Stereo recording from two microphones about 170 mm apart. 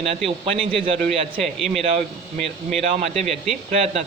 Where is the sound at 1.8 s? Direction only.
35° right (ahead or behind).